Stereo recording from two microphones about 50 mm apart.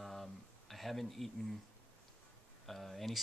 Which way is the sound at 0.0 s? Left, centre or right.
Centre.